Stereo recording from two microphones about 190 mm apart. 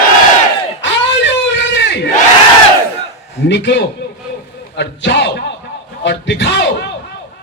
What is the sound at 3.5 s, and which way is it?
A man's voice, 65° left (ahead or behind).